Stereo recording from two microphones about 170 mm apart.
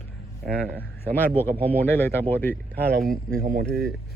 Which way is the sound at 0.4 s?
10° left (ahead or behind).